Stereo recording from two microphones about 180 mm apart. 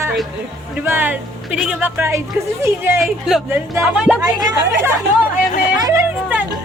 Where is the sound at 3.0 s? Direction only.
Centre (ahead or behind).